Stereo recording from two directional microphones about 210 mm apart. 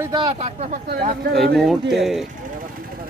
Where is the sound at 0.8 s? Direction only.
45° right (ahead or behind).